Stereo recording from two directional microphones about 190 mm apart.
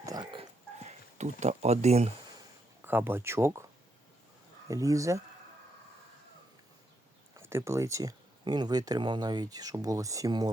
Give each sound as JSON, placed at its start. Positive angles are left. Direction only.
{"t": 0.0, "sound": "dog", "side_deg": -20}
{"t": 0.9, "sound": "speech", "side_deg": -35}
{"t": 2.8, "sound": "speech", "side_deg": -10}
{"t": 4.7, "sound": "speech", "side_deg": -15}
{"t": 7.3, "sound": "speech", "side_deg": -15}